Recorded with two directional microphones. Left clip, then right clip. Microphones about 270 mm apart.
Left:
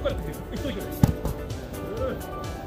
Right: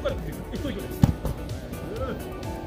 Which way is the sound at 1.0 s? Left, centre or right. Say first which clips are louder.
Even; centre.